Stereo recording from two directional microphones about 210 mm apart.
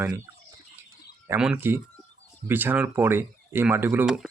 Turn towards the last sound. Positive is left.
turn(degrees=-5)  # may be behind; listen again after turning